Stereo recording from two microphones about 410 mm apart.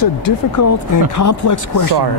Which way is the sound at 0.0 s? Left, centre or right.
Left.